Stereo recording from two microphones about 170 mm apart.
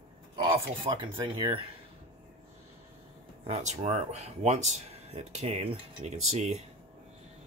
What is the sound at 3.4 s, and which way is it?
Speech, 40° right (ahead or behind).